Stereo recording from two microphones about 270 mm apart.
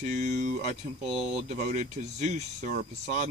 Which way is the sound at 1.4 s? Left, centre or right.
Right.